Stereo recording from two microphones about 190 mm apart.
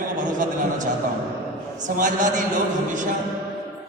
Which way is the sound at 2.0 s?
40° right (ahead or behind).